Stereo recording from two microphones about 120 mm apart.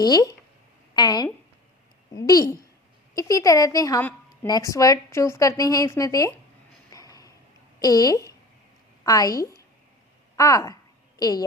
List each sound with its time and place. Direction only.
0.0 s a woman's voice: 35° left (ahead or behind)
6.9 s a sound: 30° left (ahead or behind)
7.8 s a woman's voice: 30° left (ahead or behind)